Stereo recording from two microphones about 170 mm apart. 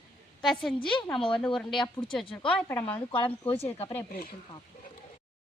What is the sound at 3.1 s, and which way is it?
Speech, 30° left (ahead or behind).